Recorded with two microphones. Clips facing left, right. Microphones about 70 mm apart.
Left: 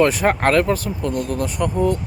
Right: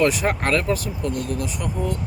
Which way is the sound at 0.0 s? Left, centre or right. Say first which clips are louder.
Left 4 dB; left.